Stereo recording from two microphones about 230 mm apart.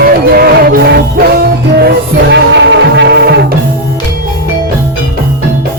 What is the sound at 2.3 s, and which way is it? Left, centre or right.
Music, right.